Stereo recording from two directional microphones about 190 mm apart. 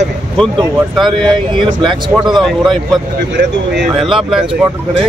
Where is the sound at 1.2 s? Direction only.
25° right (ahead or behind).